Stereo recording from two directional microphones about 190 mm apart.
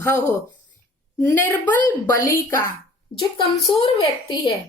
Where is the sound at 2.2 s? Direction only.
45° left (ahead or behind).